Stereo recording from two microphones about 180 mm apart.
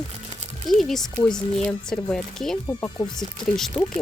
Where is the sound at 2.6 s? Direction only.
15° left (ahead or behind).